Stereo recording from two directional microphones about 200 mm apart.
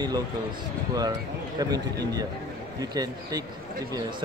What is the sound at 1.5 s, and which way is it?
Speech, 20° right (ahead or behind).